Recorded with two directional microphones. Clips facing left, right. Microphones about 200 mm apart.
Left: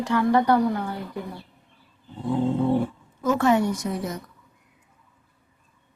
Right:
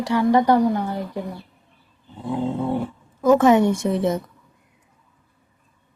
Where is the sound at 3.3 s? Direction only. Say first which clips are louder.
Right 4 dB; 20° right (ahead or behind).